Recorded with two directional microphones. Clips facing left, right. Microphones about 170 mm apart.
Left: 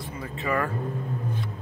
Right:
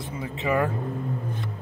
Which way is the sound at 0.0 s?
20° right (ahead or behind).